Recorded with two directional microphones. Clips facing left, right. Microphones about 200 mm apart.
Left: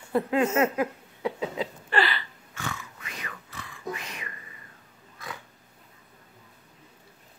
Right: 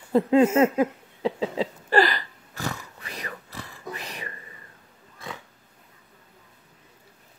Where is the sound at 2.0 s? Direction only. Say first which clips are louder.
Right 5 dB; 40° right (ahead or behind).